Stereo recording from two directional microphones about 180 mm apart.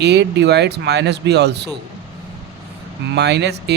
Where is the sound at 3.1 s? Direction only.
70° right (ahead or behind).